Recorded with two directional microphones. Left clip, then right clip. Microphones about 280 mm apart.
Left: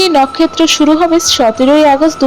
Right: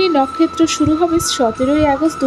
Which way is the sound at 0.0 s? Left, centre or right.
Centre.